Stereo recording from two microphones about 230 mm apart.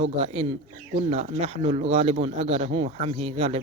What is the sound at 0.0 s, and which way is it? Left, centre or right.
Speech, right.